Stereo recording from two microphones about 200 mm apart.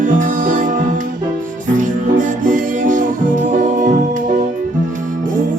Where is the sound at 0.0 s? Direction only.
40° right (ahead or behind).